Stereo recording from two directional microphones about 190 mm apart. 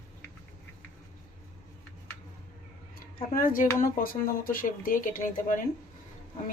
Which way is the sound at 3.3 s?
45° left (ahead or behind).